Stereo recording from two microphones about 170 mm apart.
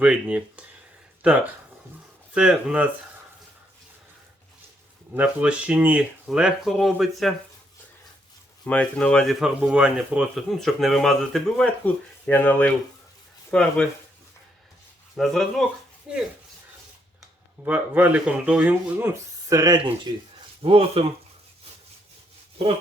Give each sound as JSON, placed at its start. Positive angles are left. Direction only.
{"t": 0.0, "sound": "speech", "side_deg": -5}
{"t": 5.1, "sound": "speech", "side_deg": -10}
{"t": 8.6, "sound": "speech", "side_deg": 5}
{"t": 15.1, "sound": "speech", "side_deg": 0}
{"t": 17.7, "sound": "speech", "side_deg": -10}
{"t": 20.7, "sound": "speech", "side_deg": -35}